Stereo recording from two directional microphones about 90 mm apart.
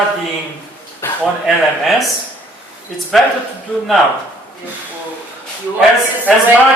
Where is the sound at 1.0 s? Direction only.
25° left (ahead or behind).